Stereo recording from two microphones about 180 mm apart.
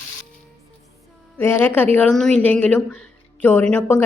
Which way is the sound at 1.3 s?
10° left (ahead or behind).